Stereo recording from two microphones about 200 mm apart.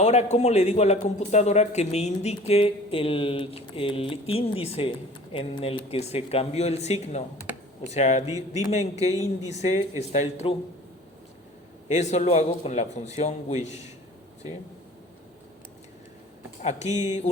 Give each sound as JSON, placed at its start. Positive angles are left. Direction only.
{"t": 0.0, "sound": "a man's voice", "side_deg": 35}
{"t": 11.9, "sound": "a man's voice", "side_deg": 35}
{"t": 16.6, "sound": "a man's voice", "side_deg": 35}